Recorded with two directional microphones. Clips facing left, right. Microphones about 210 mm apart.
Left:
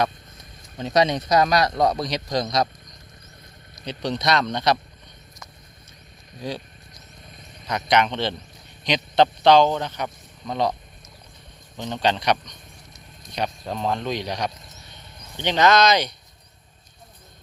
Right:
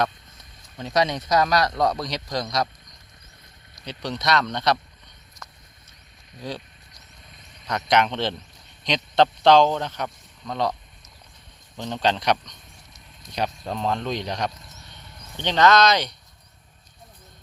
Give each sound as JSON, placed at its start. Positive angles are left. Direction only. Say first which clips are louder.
{"t": 0.8, "sound": "a man's voice", "louder": "left 3 dB", "side_deg": 20}
{"t": 3.8, "sound": "a man's voice", "louder": "left 2 dB", "side_deg": 20}
{"t": 6.4, "sound": "a man's voice", "louder": "left 2 dB", "side_deg": 15}
{"t": 7.7, "sound": "speech", "louder": "even", "side_deg": 0}
{"t": 10.4, "sound": "a man's voice", "louder": "left 2 dB", "side_deg": 15}
{"t": 11.8, "sound": "speech", "louder": "left 1 dB", "side_deg": 0}
{"t": 13.7, "sound": "a man's voice", "louder": "left 1 dB", "side_deg": 5}